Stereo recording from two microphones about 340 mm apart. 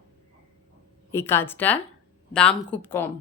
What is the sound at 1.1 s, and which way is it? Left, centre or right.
A woman's voice, centre.